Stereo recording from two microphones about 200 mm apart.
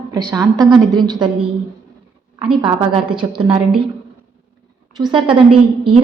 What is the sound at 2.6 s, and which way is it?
A woman's voice, 25° right (ahead or behind).